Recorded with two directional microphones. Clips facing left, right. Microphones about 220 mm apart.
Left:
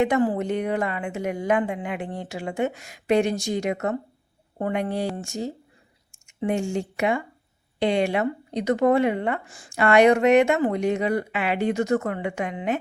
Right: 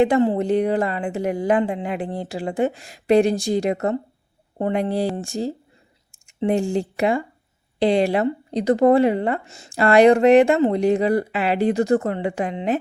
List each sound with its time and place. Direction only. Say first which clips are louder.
0.0 s speech: right 4 dB; 30° right (ahead or behind)